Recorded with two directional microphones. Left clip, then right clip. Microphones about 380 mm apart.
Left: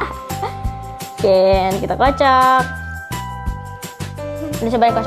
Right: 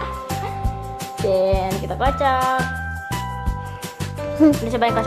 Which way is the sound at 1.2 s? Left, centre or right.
Left.